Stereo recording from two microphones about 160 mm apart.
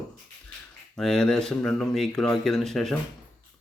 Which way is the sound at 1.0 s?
5° left (ahead or behind).